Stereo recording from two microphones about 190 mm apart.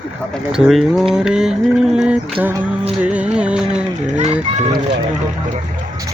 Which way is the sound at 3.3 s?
5° right (ahead or behind).